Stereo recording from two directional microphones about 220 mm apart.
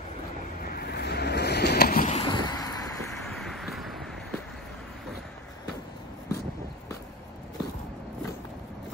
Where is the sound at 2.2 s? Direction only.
20° left (ahead or behind).